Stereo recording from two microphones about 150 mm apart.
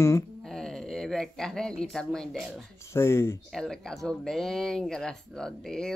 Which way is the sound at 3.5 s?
Centre (ahead or behind).